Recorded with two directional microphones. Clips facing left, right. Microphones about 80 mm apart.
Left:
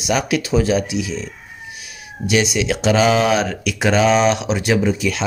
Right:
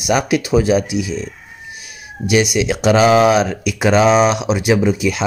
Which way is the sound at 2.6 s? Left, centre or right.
Centre.